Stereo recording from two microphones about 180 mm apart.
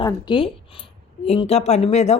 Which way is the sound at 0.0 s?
25° left (ahead or behind).